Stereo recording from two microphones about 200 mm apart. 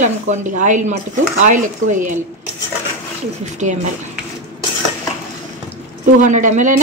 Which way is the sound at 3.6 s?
40° right (ahead or behind).